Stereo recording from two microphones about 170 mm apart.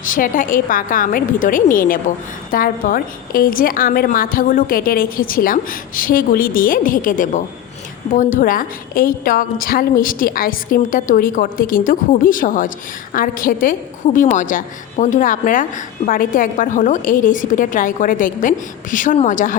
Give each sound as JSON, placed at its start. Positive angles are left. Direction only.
{"t": 0.0, "sound": "a woman's voice", "side_deg": 55}